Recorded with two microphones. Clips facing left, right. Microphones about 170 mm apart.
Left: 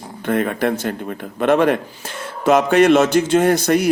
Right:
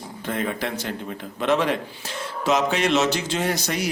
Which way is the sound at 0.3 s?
55° left (ahead or behind).